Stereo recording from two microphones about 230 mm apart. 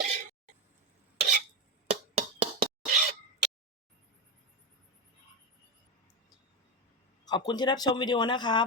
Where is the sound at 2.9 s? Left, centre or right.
Right.